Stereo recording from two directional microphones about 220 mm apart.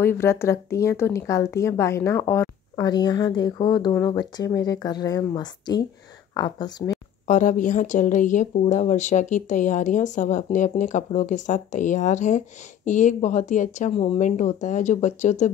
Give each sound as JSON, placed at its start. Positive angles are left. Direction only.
{"t": 0.0, "sound": "speech", "side_deg": 10}
{"t": 7.2, "sound": "a woman's voice", "side_deg": 35}